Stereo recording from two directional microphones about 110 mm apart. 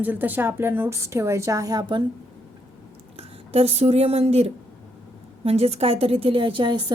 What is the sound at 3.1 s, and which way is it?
A woman's voice, 65° right (ahead or behind).